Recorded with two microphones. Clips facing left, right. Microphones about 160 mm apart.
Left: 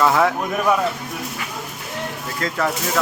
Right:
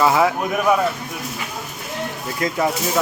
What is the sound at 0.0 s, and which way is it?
Speech, 5° right (ahead or behind).